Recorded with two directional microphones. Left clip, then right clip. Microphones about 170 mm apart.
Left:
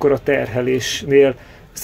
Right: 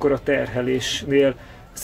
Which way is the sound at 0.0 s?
25° left (ahead or behind).